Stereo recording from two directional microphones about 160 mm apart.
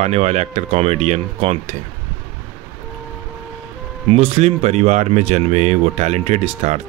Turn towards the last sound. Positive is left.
turn(degrees=-45)  # may be behind; listen again after turning